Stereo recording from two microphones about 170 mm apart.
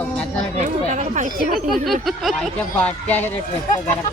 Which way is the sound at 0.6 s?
45° right (ahead or behind).